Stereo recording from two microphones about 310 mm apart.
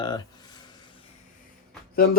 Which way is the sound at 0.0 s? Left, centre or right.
Centre.